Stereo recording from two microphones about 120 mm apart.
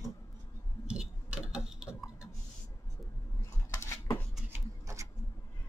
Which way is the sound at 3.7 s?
25° left (ahead or behind).